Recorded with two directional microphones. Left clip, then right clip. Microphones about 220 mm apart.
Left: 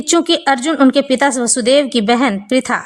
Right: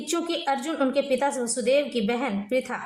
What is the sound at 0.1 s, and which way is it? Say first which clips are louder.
A woman's voice: left 13 dB; 40° left (ahead or behind).